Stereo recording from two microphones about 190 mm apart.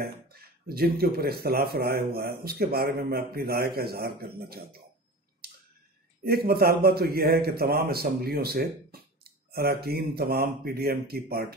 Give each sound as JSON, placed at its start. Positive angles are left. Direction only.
{"t": 0.0, "sound": "speech", "side_deg": -55}
{"t": 6.2, "sound": "speech", "side_deg": -55}